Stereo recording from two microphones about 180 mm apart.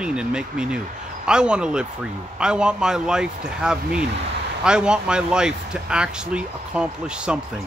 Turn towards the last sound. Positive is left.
turn(degrees=-5)  # may be behind; listen again after turning